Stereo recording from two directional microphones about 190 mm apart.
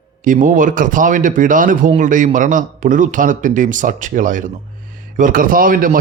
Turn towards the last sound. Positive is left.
turn(degrees=-45)  # may be behind; listen again after turning